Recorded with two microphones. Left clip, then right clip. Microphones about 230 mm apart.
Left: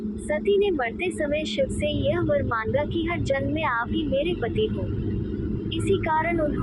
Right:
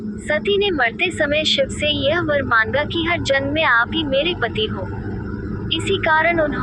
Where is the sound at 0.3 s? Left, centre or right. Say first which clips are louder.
Right 4 dB; right.